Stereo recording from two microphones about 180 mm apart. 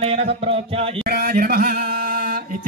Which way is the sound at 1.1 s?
60° right (ahead or behind).